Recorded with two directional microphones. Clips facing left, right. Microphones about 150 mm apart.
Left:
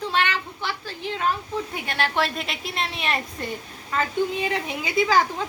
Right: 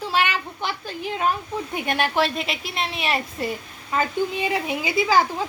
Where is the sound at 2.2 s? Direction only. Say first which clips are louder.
Right 3 dB; centre (ahead or behind).